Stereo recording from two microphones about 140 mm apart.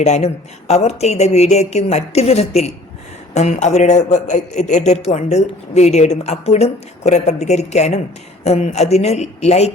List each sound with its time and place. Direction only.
0.0 s a man's voice: 50° left (ahead or behind)